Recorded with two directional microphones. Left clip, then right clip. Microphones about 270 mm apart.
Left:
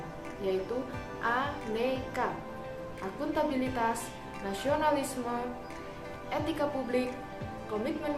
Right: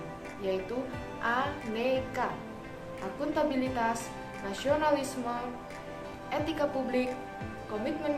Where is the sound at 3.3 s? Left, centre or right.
Centre.